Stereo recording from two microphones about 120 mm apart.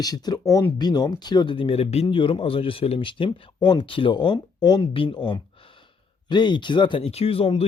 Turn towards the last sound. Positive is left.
turn(degrees=50)  # may be behind; listen again after turning